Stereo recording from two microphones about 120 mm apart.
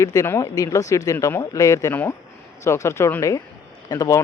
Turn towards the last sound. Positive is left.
turn(degrees=30)  # may be behind; listen again after turning